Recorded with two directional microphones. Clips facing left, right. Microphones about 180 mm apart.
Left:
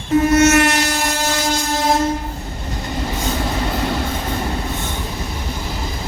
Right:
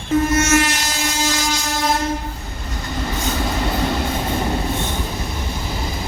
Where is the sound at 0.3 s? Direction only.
65° left (ahead or behind).